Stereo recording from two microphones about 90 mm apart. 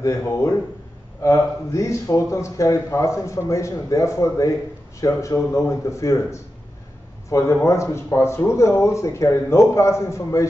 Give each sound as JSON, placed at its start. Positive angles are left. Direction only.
{"t": 0.0, "sound": "a man's voice", "side_deg": 30}